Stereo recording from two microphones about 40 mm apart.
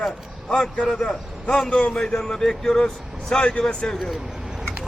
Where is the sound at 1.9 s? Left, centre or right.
Centre.